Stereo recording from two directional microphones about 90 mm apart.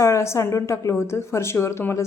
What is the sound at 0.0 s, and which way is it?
A woman's voice, 35° left (ahead or behind).